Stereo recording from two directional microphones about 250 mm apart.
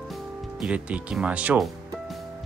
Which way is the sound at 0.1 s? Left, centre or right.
Centre.